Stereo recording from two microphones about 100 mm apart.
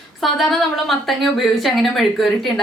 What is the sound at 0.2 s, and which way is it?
A woman's voice, centre (ahead or behind).